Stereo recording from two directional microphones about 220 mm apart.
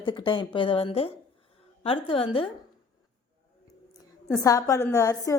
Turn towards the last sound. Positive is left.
turn(degrees=15)  # may be behind; listen again after turning